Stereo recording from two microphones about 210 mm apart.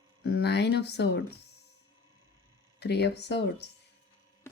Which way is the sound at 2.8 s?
50° left (ahead or behind).